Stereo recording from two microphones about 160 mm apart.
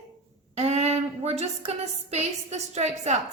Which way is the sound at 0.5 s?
40° right (ahead or behind).